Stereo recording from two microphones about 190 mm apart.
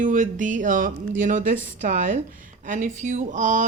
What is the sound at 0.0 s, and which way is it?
A woman's voice, 40° right (ahead or behind).